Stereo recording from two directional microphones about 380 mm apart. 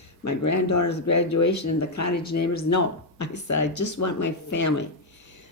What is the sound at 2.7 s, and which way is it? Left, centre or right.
Speech, left.